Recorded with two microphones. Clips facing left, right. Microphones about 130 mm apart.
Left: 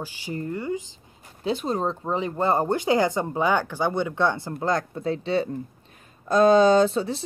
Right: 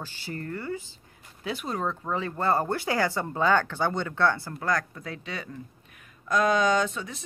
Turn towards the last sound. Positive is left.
turn(degrees=30)  # may be behind; listen again after turning